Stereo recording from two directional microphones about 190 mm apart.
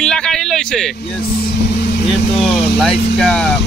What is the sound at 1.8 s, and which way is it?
Vehicle, 60° left (ahead or behind).